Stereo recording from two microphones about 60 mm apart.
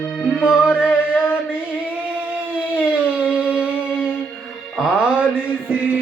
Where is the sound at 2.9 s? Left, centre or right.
Right.